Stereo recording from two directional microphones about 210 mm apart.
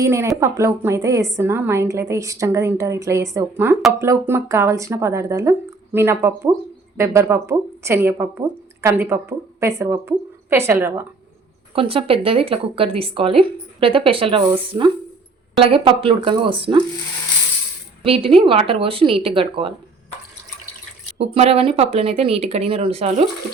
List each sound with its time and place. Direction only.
0.0 s speech: 15° right (ahead or behind)
11.7 s speech: 25° right (ahead or behind)
18.0 s speech: 25° right (ahead or behind)
21.2 s speech: 30° right (ahead or behind)